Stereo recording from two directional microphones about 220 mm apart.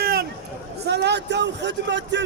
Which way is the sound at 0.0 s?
45° right (ahead or behind).